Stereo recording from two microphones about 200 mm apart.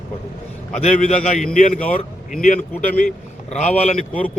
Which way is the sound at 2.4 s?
40° left (ahead or behind).